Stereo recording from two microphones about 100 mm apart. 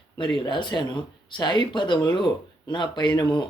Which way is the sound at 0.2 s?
55° left (ahead or behind).